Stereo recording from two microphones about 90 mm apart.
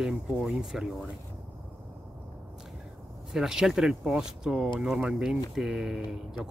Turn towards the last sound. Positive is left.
turn(degrees=-5)  # may be behind; listen again after turning